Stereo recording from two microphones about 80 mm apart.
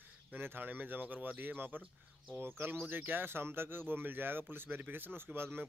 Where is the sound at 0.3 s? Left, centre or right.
Right.